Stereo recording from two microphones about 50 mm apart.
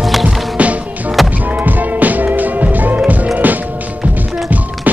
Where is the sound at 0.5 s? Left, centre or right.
Right.